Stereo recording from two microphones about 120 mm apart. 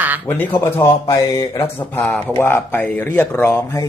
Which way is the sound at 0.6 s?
20° left (ahead or behind).